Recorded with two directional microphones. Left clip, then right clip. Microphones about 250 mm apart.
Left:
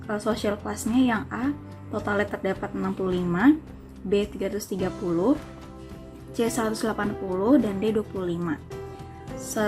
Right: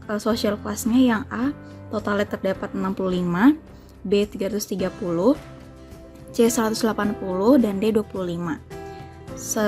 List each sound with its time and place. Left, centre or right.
0.1 s a woman's voice: right
6.3 s a woman's voice: right